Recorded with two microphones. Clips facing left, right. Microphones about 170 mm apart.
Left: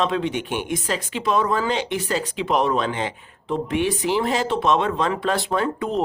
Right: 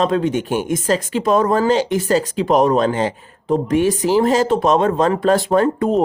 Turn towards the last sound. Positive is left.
turn(degrees=-45)  # may be behind; listen again after turning